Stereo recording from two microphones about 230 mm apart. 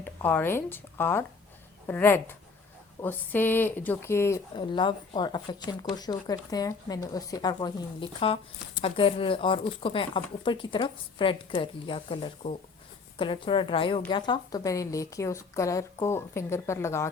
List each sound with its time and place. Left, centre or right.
0.0 s speech: centre